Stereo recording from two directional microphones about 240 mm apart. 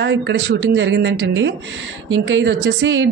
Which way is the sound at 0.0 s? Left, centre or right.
Right.